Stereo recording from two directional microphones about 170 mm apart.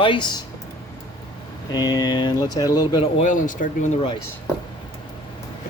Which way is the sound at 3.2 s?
50° left (ahead or behind).